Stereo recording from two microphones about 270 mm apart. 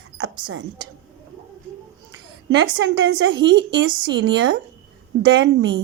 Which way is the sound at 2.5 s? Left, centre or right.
Right.